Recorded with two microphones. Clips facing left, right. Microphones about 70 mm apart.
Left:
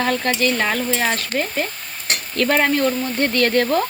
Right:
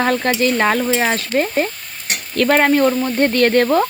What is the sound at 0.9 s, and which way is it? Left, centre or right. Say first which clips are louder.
Stir: right 4 dB; right.